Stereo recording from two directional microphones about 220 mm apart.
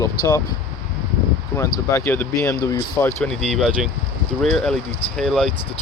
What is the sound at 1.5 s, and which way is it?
Speech, 15° left (ahead or behind).